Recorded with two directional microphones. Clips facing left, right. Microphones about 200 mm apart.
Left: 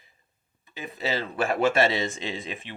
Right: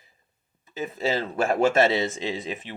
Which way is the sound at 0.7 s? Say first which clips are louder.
Right 4 dB; 45° right (ahead or behind).